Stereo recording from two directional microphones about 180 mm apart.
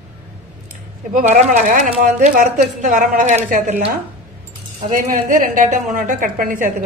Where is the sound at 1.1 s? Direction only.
40° right (ahead or behind).